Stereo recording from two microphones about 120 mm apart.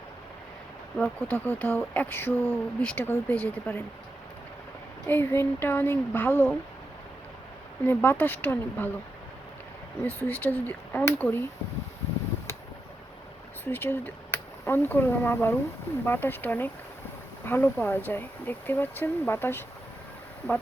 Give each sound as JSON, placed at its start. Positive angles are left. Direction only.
{"t": 0.9, "sound": "speech", "side_deg": 10}
{"t": 5.0, "sound": "speech", "side_deg": 20}
{"t": 7.9, "sound": "speech", "side_deg": 15}
{"t": 10.0, "sound": "speech", "side_deg": 15}
{"t": 13.7, "sound": "speech", "side_deg": 15}